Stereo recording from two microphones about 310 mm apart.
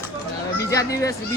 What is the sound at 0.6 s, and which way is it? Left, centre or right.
Speech, centre.